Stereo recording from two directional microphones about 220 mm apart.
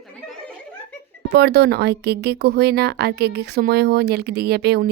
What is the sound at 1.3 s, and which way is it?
Speech, 50° right (ahead or behind).